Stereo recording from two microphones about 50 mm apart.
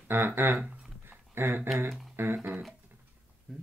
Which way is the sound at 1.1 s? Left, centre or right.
Right.